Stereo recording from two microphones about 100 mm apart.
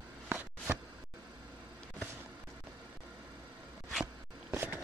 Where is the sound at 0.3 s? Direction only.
20° right (ahead or behind).